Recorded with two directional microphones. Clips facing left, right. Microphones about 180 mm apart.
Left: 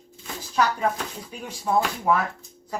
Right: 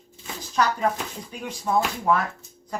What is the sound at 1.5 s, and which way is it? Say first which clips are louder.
Speech: even; 10° left (ahead or behind).